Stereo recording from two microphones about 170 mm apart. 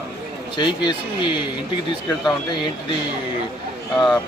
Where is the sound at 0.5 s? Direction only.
25° left (ahead or behind).